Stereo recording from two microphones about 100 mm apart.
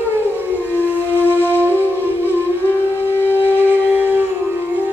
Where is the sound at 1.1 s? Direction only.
20° right (ahead or behind).